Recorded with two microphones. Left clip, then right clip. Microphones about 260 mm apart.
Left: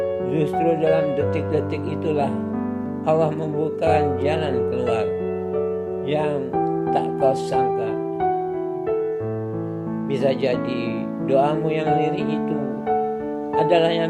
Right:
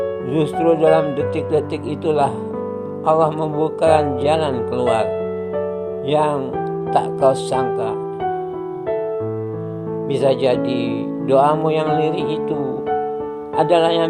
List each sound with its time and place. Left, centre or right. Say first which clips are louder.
0.3 s speech: right 5 dB; centre
2.0 s speech: right 6 dB; centre
6.1 s speech: right 6 dB; centre
10.1 s speech: right 5 dB; centre
13.6 s speech: right 3 dB; centre